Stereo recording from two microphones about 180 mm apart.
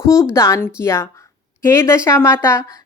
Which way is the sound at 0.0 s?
15° left (ahead or behind).